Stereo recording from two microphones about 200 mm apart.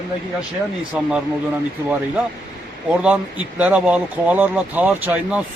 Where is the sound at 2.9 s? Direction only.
5° right (ahead or behind).